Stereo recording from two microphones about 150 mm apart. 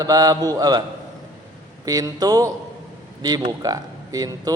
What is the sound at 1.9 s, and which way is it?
Speech, 25° right (ahead or behind).